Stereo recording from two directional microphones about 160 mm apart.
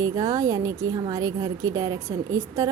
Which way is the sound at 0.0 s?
20° right (ahead or behind).